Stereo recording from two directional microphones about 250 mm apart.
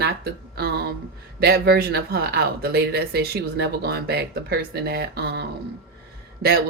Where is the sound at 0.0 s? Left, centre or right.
Right.